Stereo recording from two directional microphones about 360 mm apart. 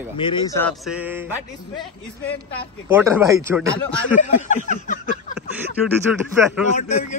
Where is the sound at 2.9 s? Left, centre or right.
Centre.